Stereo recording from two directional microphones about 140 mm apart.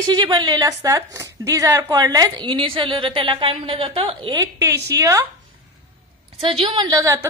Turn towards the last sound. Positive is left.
turn(degrees=-20)  # may be behind; listen again after turning